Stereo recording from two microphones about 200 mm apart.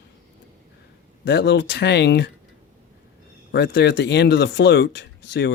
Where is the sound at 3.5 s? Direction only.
60° left (ahead or behind).